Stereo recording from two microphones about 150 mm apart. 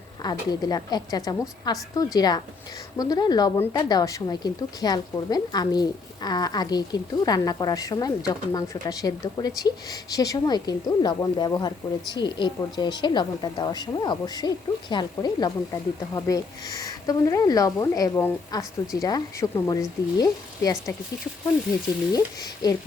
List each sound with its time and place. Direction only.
0.2 s a woman's voice: 25° left (ahead or behind)
22.1 s a woman's voice: 25° left (ahead or behind)